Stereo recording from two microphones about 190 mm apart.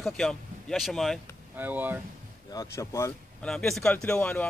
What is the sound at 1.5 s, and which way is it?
Speech, 10° right (ahead or behind).